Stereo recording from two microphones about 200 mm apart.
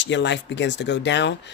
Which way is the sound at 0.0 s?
60° left (ahead or behind).